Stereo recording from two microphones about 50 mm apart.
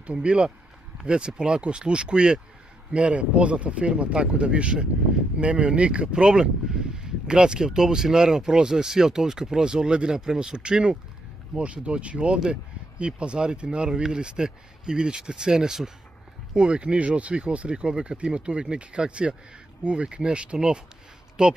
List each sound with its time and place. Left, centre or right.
0.0 s speech: right